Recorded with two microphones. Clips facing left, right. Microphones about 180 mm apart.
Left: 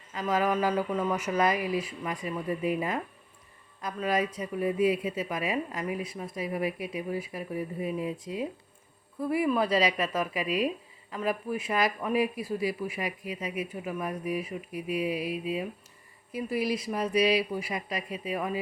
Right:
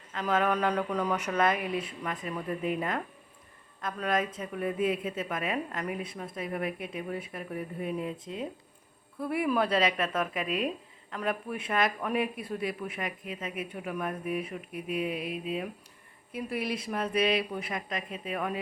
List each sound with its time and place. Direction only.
0.1 s speech: 5° left (ahead or behind)